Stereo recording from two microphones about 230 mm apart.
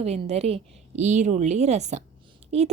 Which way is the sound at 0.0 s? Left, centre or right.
Right.